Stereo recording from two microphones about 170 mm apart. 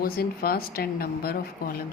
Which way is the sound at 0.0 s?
60° left (ahead or behind).